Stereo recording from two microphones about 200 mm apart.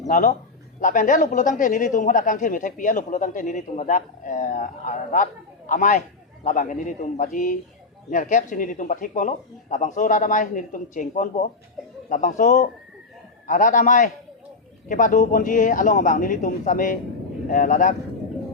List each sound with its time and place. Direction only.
0.1 s a man's voice: 40° left (ahead or behind)